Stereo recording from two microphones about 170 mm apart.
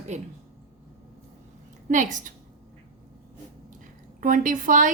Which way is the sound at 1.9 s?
45° right (ahead or behind).